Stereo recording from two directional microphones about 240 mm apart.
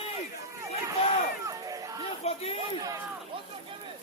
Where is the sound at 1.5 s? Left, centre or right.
Centre.